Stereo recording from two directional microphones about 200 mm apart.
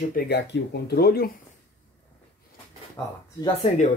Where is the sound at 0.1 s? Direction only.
55° left (ahead or behind).